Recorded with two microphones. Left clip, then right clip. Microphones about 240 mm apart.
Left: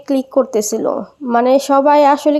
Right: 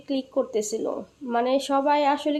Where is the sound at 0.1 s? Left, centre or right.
Left.